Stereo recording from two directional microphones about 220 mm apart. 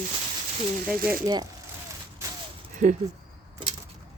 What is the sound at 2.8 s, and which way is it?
Speech, 35° right (ahead or behind).